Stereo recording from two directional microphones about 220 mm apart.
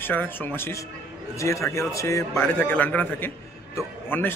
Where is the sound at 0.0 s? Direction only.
10° left (ahead or behind).